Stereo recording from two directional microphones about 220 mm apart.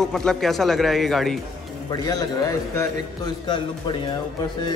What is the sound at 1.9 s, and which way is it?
Speech, 15° left (ahead or behind).